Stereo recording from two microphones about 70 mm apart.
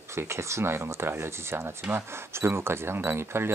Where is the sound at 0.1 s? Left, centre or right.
Right.